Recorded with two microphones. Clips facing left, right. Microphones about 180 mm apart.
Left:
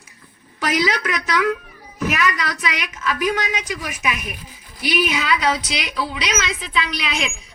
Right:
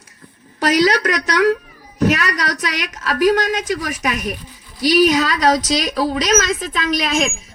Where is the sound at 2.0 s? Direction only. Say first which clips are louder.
Right 4 dB; 40° right (ahead or behind).